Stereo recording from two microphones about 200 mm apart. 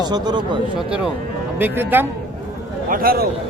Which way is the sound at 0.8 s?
5° right (ahead or behind).